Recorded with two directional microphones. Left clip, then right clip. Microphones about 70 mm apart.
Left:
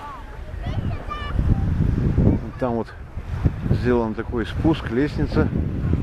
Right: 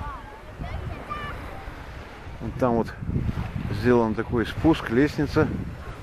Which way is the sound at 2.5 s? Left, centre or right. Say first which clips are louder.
Right 1 dB; right.